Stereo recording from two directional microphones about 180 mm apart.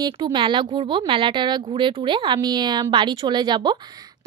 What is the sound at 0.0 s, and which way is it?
A woman's voice, 25° right (ahead or behind).